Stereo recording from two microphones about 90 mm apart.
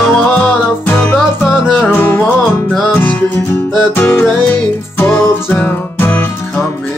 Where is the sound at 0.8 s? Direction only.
20° left (ahead or behind).